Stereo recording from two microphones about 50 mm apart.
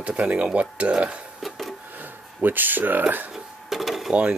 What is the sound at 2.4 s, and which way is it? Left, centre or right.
Speech, right.